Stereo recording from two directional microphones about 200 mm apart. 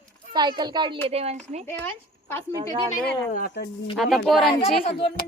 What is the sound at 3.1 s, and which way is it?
Speech, 50° left (ahead or behind).